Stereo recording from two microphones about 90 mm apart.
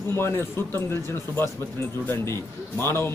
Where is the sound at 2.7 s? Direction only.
30° left (ahead or behind).